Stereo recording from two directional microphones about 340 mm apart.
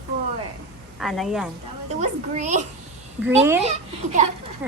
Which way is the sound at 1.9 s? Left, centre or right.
Right.